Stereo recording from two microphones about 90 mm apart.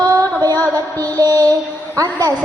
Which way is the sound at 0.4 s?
45° right (ahead or behind).